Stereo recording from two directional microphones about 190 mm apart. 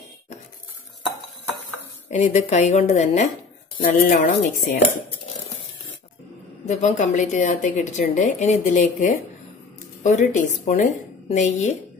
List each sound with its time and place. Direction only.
2.0 s a woman's voice: 40° left (ahead or behind)
6.6 s a woman's voice: 40° left (ahead or behind)